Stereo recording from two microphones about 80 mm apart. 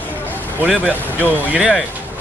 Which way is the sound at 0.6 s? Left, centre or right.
Right.